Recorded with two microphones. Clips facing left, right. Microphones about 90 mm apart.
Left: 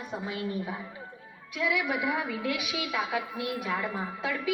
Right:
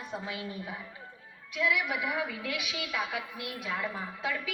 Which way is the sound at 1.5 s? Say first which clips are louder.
Left 1 dB; 20° left (ahead or behind).